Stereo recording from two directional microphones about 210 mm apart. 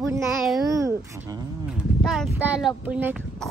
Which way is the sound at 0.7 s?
15° right (ahead or behind).